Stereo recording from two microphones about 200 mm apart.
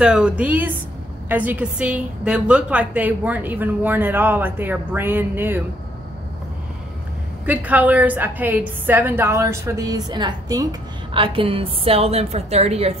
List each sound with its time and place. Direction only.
0.0 s a woman's voice: 5° right (ahead or behind)
7.4 s a woman's voice: 10° right (ahead or behind); by 12.9 s 30° right (ahead or behind)